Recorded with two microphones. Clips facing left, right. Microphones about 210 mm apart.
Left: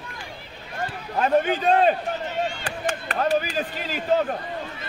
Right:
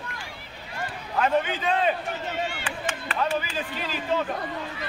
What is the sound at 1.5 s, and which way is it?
Speech, 50° left (ahead or behind).